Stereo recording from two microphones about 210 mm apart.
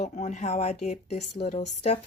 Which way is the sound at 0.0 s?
35° left (ahead or behind).